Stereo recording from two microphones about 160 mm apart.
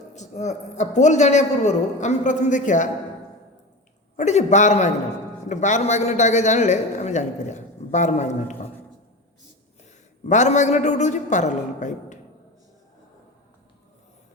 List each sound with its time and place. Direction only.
0.1 s a man's voice: 45° left (ahead or behind)
4.2 s a man's voice: 45° left (ahead or behind)
10.2 s a man's voice: 50° left (ahead or behind)